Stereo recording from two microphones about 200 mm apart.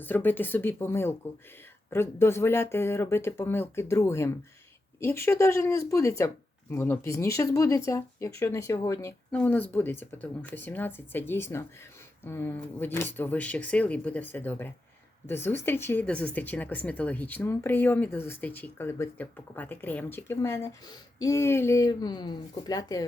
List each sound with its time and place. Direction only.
0.0 s speech: 10° left (ahead or behind)